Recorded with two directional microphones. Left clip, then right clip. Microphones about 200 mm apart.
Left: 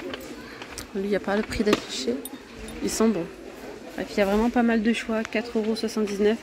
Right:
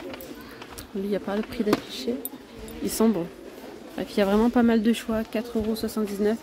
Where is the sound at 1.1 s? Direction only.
Centre (ahead or behind).